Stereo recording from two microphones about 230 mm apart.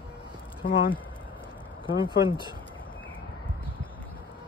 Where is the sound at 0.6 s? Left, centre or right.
Left.